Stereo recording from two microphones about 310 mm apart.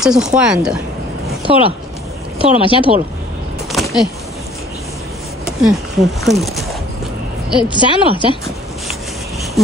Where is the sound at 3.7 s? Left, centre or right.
Centre.